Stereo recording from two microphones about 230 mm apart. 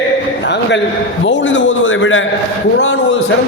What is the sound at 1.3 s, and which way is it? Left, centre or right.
A man's voice, left.